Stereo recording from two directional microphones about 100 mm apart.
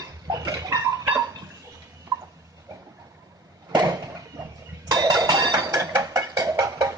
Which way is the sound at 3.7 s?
40° right (ahead or behind).